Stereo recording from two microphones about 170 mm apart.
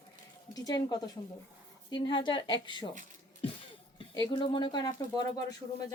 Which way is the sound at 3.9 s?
25° left (ahead or behind).